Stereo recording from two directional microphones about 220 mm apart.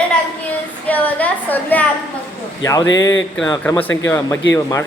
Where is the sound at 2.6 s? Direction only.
15° left (ahead or behind).